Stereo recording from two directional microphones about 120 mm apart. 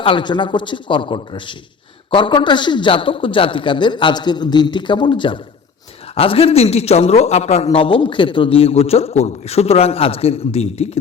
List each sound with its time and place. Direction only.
0.0 s a man's voice: 40° left (ahead or behind); by 10.8 s 60° left (ahead or behind)